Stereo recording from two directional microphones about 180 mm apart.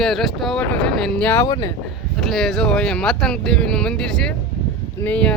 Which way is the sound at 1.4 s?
20° left (ahead or behind).